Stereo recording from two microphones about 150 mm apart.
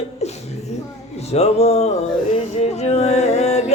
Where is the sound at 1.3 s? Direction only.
45° left (ahead or behind).